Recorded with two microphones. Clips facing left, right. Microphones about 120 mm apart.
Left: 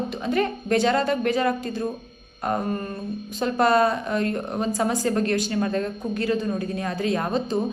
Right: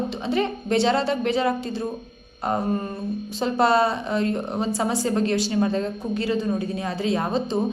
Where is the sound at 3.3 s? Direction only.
30° right (ahead or behind).